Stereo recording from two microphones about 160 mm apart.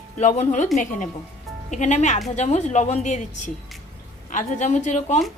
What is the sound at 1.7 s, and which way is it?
A woman's voice, 45° left (ahead or behind).